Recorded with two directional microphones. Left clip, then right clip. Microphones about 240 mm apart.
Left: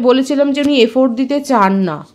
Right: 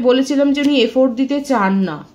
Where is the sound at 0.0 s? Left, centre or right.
Left.